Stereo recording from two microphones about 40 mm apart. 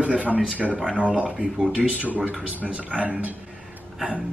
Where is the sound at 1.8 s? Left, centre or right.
Right.